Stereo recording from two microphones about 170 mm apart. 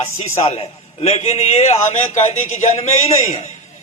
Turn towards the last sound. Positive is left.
turn(degrees=45)  # may be behind; listen again after turning